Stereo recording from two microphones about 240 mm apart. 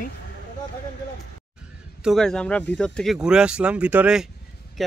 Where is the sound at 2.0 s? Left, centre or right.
Centre.